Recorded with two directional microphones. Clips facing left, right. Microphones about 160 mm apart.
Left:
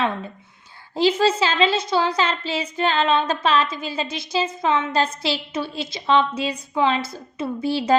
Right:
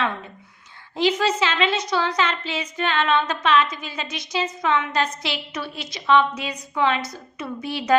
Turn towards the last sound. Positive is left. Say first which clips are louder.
# left 2 dB
turn(degrees=30)  # may be behind; listen again after turning